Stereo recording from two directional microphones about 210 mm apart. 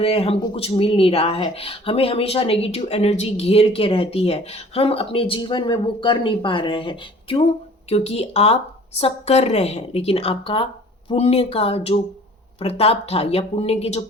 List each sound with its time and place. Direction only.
0.0 s speech: 30° left (ahead or behind)